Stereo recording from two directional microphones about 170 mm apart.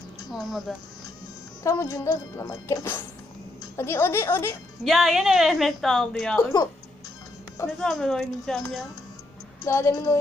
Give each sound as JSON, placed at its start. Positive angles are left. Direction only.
{"t": 0.3, "sound": "a woman's voice", "side_deg": 0}
{"t": 1.6, "sound": "speech", "side_deg": 20}
{"t": 4.8, "sound": "a woman's voice", "side_deg": 0}
{"t": 7.8, "sound": "a woman's voice", "side_deg": 0}
{"t": 9.6, "sound": "speech", "side_deg": 15}